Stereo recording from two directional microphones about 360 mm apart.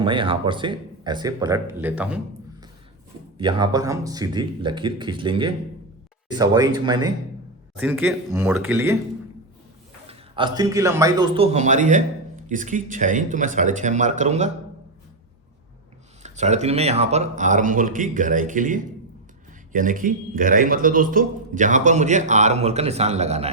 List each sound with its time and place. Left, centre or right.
0.0 s speech: centre
3.3 s speech: centre
10.1 s a man's voice: centre
16.2 s a man's voice: centre